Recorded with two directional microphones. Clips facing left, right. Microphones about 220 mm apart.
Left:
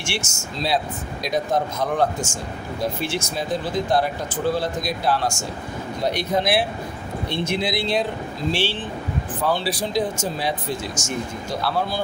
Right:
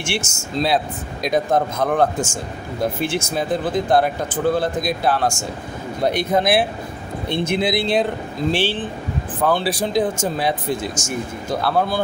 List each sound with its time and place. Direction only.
0.0 s speech: 55° right (ahead or behind)